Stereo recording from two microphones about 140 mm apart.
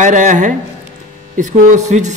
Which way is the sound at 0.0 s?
65° right (ahead or behind).